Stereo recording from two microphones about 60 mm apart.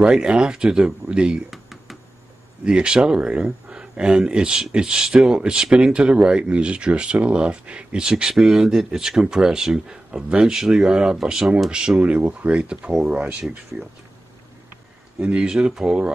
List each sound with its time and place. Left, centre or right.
0.1 s speech: centre
1.5 s a sound: centre
2.6 s speech: centre
12.0 s speech: right
15.1 s speech: centre